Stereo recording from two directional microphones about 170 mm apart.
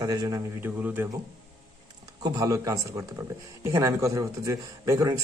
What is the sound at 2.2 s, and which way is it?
A man's voice, 20° right (ahead or behind).